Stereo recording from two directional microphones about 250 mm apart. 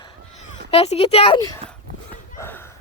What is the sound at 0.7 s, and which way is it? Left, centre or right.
Speech, left.